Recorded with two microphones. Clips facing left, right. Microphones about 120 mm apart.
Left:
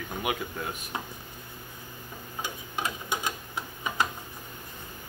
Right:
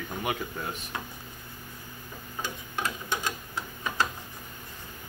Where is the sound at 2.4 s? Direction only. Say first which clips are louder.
Even; 15° left (ahead or behind).